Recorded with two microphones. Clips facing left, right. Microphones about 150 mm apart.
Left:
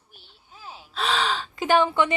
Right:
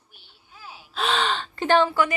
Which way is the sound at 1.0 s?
Centre (ahead or behind).